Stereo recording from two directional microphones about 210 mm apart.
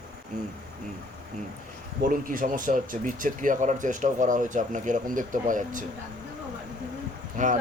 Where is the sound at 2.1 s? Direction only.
40° right (ahead or behind).